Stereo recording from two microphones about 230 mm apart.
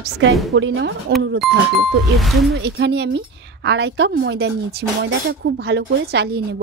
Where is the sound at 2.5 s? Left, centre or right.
Right.